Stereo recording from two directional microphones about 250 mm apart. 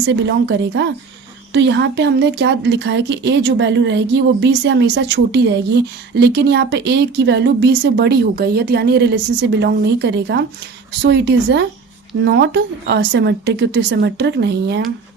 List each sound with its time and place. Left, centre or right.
0.3 s speech: right